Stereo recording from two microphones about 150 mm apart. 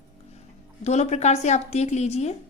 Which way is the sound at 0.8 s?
50° left (ahead or behind).